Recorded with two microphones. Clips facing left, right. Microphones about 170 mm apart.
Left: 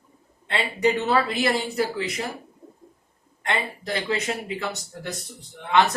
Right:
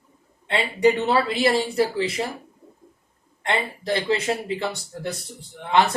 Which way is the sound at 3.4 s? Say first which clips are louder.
Right 2 dB; 30° right (ahead or behind).